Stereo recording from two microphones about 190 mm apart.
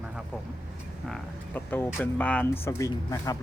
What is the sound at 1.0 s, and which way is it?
Speech, 5° left (ahead or behind).